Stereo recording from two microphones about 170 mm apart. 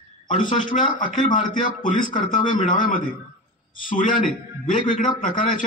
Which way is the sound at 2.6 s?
50° left (ahead or behind).